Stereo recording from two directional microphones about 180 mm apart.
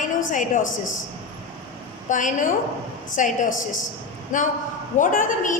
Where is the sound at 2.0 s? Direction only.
45° left (ahead or behind).